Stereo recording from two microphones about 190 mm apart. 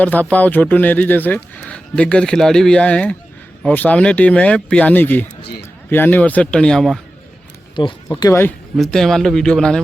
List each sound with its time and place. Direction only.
0.0 s speech: 10° left (ahead or behind)
7.8 s speech: 20° left (ahead or behind)
8.7 s speech: centre (ahead or behind)